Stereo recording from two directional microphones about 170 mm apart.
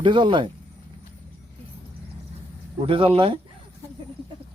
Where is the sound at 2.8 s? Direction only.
35° right (ahead or behind).